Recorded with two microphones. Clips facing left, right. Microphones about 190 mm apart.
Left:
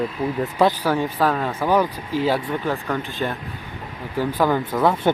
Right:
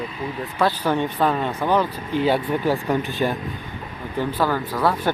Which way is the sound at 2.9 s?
15° right (ahead or behind).